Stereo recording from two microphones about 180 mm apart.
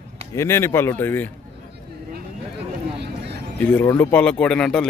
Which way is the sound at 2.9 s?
65° right (ahead or behind).